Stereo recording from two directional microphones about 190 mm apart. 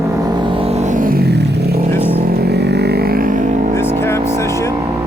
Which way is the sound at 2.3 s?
60° right (ahead or behind).